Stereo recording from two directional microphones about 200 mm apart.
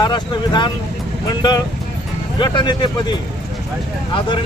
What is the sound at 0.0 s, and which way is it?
Speech, 20° left (ahead or behind).